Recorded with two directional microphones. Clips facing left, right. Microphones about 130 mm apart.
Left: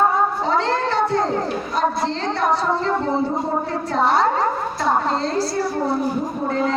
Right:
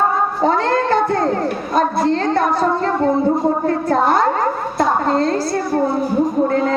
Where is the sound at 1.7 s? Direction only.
50° right (ahead or behind).